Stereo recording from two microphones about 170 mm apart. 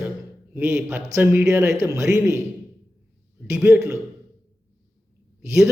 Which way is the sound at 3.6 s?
10° right (ahead or behind).